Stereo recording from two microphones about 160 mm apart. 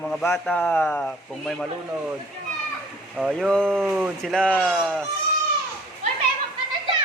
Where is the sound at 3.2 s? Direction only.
Centre (ahead or behind).